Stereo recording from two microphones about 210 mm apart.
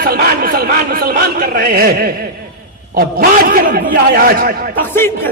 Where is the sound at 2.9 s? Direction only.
45° right (ahead or behind).